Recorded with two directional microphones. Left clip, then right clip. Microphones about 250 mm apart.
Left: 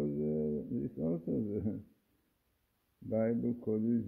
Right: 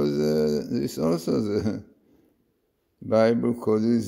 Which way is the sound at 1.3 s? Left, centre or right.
Right.